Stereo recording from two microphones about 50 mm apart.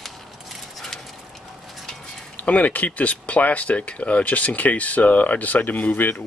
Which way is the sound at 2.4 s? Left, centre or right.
Left.